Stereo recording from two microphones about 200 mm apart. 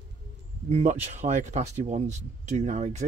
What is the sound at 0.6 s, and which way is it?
Speech, 35° right (ahead or behind).